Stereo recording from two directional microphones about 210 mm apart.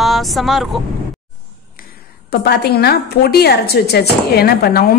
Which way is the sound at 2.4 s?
50° left (ahead or behind).